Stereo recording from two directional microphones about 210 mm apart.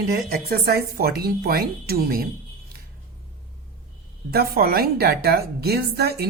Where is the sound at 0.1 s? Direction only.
45° right (ahead or behind).